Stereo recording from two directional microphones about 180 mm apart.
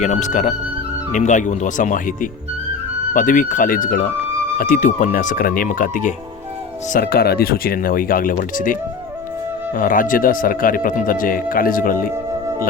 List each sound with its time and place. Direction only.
0.0 s speech: 40° left (ahead or behind)
6.9 s speech: 60° left (ahead or behind)